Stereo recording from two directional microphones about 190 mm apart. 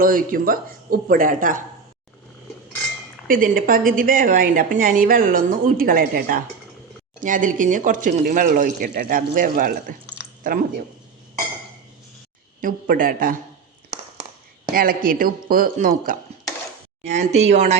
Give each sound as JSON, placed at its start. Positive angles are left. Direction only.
{"t": 0.0, "sound": "a woman's voice", "side_deg": -45}
{"t": 3.2, "sound": "a woman's voice", "side_deg": -45}
{"t": 12.5, "sound": "a woman's voice", "side_deg": -45}
{"t": 14.7, "sound": "a woman's voice", "side_deg": -50}
{"t": 17.0, "sound": "speech", "side_deg": -35}